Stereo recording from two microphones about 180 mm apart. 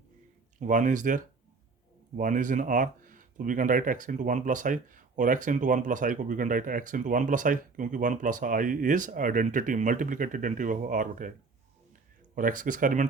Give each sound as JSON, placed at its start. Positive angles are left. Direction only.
{"t": 0.6, "sound": "speech", "side_deg": -45}
{"t": 12.3, "sound": "speech", "side_deg": -50}